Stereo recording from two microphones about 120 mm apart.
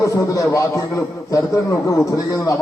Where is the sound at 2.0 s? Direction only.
30° left (ahead or behind).